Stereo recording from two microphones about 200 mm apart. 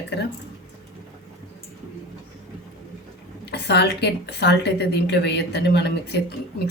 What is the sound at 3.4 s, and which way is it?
A woman's voice, 55° left (ahead or behind).